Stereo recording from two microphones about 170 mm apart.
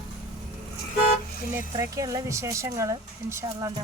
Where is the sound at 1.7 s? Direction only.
20° right (ahead or behind).